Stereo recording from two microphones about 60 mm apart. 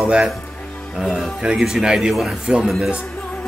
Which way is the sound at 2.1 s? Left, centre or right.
Centre.